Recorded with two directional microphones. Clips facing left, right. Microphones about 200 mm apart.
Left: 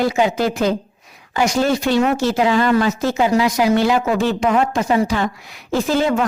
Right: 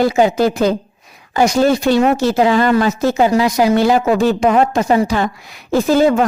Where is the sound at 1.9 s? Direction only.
40° right (ahead or behind).